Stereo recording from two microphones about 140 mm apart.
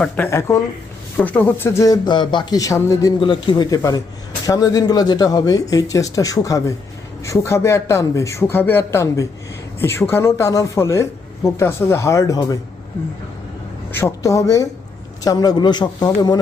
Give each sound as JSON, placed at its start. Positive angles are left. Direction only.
{"t": 0.3, "sound": "speech", "side_deg": 20}
{"t": 3.2, "sound": "speech", "side_deg": 35}
{"t": 14.0, "sound": "speech", "side_deg": 20}